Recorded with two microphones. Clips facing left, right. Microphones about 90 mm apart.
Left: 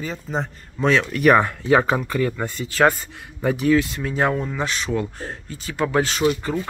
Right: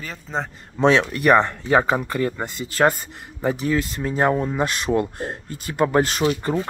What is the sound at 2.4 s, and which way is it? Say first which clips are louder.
Speech: left 1 dB; 25° right (ahead or behind).